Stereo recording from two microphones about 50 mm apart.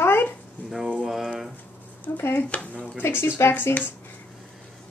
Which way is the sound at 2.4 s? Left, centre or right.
Left.